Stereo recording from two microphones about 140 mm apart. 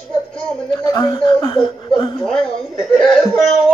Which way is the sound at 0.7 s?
25° left (ahead or behind).